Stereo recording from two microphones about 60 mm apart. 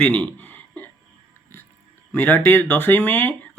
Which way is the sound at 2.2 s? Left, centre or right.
Left.